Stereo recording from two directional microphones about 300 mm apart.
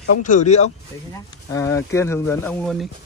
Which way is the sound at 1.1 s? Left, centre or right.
Centre.